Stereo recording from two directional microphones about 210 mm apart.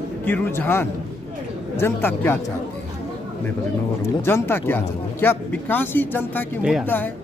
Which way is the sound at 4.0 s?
10° left (ahead or behind).